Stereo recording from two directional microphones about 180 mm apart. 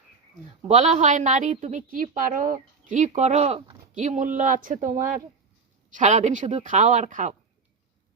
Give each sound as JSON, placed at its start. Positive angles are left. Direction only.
{"t": 0.7, "sound": "a woman's voice", "side_deg": -40}